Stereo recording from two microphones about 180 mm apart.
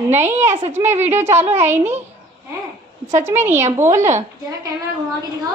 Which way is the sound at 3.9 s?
40° right (ahead or behind).